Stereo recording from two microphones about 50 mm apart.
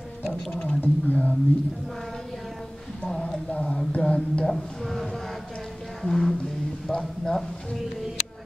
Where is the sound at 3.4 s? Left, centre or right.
Left.